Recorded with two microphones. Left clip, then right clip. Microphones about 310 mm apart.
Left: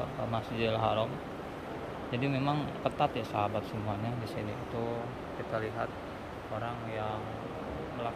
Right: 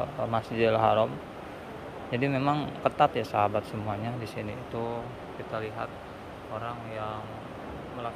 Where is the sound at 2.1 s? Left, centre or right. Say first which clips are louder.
Right 5 dB; centre.